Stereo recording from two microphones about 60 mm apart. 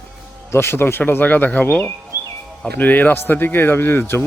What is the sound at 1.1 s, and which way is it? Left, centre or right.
Speech, left.